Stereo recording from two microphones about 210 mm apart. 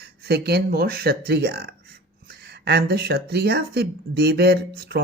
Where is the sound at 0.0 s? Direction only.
50° right (ahead or behind).